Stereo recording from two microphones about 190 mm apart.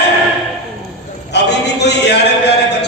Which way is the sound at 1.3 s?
65° left (ahead or behind).